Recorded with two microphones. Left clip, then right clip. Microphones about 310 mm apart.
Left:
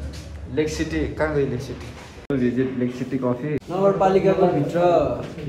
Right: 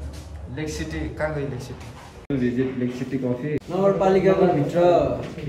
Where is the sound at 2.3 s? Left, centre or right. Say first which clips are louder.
Left 2 dB; centre.